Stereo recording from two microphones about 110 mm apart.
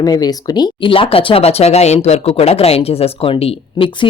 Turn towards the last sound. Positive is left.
turn(degrees=50)  # may be behind; listen again after turning